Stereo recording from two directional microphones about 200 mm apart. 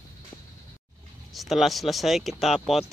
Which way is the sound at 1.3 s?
Centre (ahead or behind).